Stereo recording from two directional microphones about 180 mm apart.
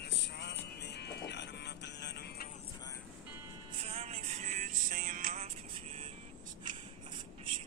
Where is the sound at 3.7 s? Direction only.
35° right (ahead or behind).